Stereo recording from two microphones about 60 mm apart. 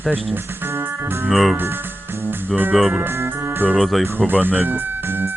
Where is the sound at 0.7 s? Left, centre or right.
Right.